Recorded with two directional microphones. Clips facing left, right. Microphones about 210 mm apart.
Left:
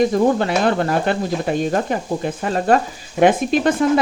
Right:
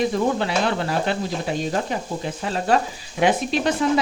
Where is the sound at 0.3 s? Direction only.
50° left (ahead or behind).